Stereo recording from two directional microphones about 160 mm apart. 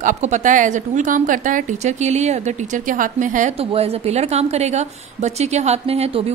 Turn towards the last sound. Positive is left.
turn(degrees=-40)  # may be behind; listen again after turning